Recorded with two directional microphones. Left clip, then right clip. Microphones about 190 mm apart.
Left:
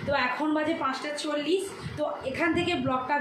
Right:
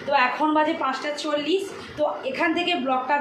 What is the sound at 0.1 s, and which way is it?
Speech, 20° left (ahead or behind).